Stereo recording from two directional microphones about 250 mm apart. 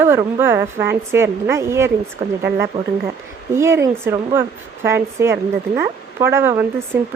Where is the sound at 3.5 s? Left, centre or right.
Centre.